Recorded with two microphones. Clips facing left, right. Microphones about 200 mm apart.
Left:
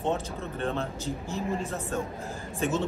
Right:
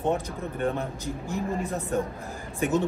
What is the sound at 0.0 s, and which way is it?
A man's voice, 15° right (ahead or behind).